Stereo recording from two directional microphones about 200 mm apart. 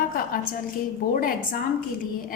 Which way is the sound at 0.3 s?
45° left (ahead or behind).